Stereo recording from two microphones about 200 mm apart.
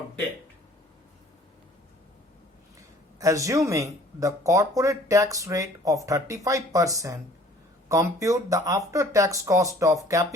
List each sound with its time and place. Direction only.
3.2 s speech: 15° right (ahead or behind)